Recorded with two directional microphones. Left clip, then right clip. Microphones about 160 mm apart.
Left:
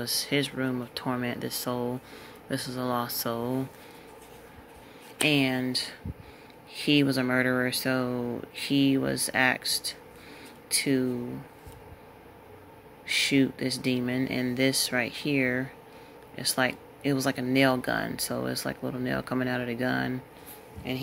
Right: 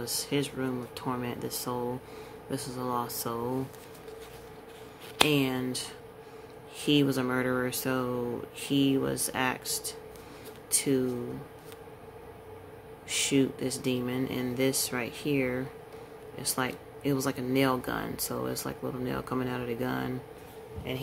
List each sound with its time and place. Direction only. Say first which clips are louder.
0.0 s speech: left 3 dB; 35° left (ahead or behind)
5.3 s speech: left 3 dB; 30° left (ahead or behind)
13.0 s speech: left 3 dB; 25° left (ahead or behind)